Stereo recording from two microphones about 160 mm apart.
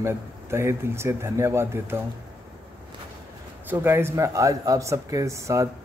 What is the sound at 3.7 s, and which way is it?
Speech, 15° right (ahead or behind).